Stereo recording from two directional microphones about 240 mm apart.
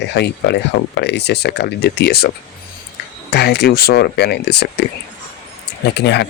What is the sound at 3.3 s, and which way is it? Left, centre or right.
Speech, left.